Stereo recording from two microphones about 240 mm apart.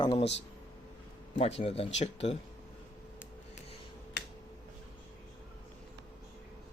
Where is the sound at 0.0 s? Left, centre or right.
Left.